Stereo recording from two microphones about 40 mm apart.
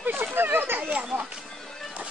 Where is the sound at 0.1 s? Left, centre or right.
Right.